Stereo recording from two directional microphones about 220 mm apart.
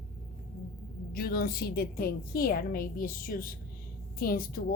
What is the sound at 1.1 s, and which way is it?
Speech, 45° left (ahead or behind).